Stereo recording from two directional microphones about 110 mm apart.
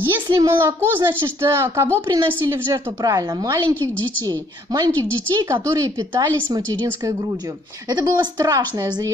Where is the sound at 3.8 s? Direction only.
15° left (ahead or behind).